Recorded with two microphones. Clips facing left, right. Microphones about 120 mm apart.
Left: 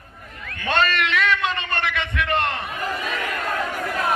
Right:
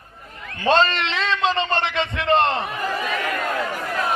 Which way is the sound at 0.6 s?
25° right (ahead or behind).